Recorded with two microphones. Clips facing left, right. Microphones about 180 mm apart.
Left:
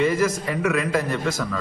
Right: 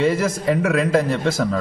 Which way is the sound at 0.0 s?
30° right (ahead or behind).